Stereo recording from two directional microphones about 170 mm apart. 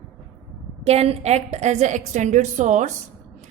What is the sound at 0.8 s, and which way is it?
A woman's voice, 35° right (ahead or behind).